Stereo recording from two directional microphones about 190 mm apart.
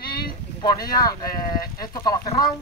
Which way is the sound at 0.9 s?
20° left (ahead or behind).